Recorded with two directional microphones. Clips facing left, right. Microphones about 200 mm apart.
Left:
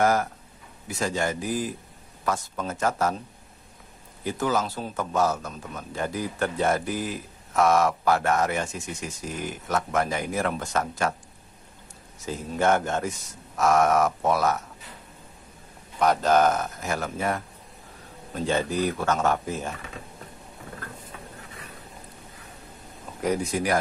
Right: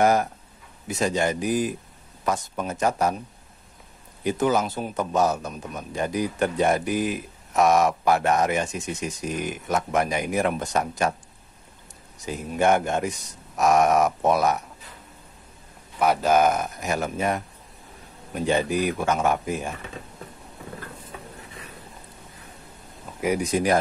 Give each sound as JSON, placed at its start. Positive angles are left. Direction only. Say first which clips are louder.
{"t": 0.0, "sound": "a man's voice", "louder": "right 2 dB", "side_deg": -20}
{"t": 4.2, "sound": "a man's voice", "louder": "right 4 dB", "side_deg": -20}
{"t": 12.3, "sound": "a man's voice", "louder": "right 2 dB", "side_deg": -15}
{"t": 16.0, "sound": "a man's voice", "louder": "right 1 dB", "side_deg": -10}
{"t": 23.2, "sound": "speech", "louder": "right 3 dB", "side_deg": -15}